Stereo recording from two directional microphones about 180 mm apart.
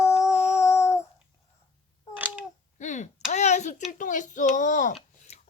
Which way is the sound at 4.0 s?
45° left (ahead or behind).